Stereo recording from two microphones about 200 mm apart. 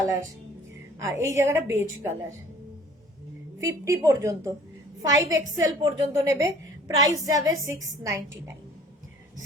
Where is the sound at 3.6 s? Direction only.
15° right (ahead or behind).